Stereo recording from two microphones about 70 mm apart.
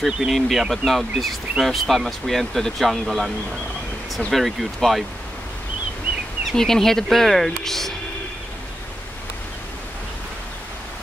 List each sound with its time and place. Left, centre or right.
0.0 s speech: centre
4.3 s speech: centre
6.5 s speech: centre